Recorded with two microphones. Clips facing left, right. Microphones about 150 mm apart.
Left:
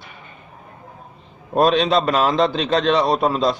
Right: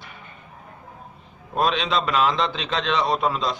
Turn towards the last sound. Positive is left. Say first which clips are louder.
# left 5 dB
turn(degrees=40)  # may be behind; listen again after turning